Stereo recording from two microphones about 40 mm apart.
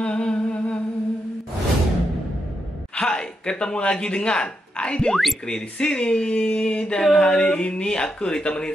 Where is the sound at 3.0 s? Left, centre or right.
Centre.